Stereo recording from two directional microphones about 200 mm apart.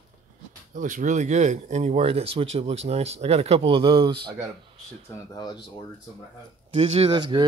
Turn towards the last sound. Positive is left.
turn(degrees=-20)  # may be behind; listen again after turning